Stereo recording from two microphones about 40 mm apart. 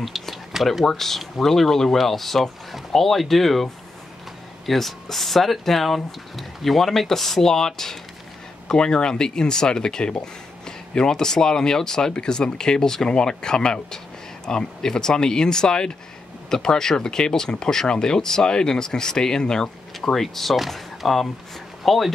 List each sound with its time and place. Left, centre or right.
0.0 s a sound: centre
0.8 s speech: centre
4.6 s speech: centre